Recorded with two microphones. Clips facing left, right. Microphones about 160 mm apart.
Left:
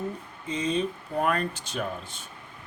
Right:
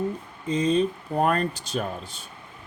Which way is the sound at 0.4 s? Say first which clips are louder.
Right 5 dB; 35° right (ahead or behind).